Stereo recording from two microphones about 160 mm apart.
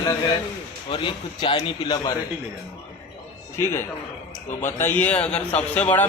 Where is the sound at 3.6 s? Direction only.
15° left (ahead or behind).